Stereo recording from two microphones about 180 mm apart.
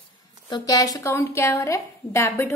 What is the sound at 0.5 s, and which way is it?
A woman's voice, 20° left (ahead or behind).